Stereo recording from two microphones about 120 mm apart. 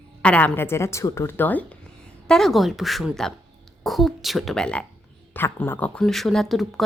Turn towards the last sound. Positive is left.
turn(degrees=0)  # may be behind; listen again after turning